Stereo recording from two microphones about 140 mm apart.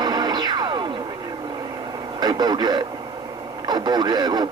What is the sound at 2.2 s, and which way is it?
Speech, 30° right (ahead or behind).